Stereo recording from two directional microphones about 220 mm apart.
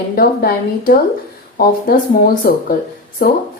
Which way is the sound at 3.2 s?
40° left (ahead or behind).